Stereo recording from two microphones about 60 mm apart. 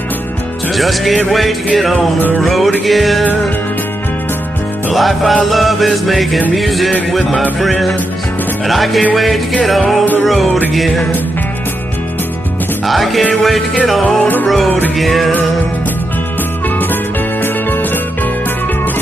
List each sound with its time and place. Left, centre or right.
0.7 s music: centre
4.9 s music: centre
12.8 s music: centre
14.0 s music: left
15.0 s music: centre